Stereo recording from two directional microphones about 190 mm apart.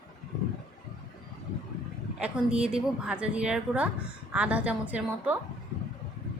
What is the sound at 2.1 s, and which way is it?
A woman's voice, 5° right (ahead or behind).